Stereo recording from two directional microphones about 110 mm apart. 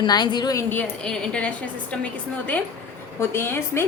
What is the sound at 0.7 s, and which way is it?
A woman's voice, 10° left (ahead or behind).